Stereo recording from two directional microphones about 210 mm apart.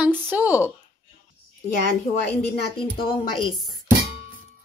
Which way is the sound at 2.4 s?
25° left (ahead or behind).